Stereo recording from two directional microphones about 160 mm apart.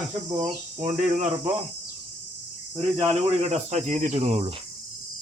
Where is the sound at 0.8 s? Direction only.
45° right (ahead or behind).